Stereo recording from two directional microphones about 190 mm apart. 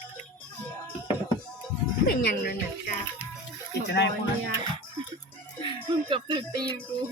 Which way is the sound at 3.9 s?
65° left (ahead or behind).